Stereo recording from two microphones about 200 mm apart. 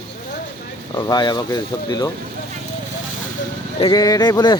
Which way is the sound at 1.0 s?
20° left (ahead or behind).